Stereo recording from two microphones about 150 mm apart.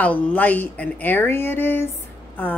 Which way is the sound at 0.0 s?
10° left (ahead or behind).